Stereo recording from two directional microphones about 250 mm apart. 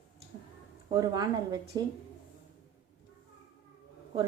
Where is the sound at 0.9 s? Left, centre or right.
Centre.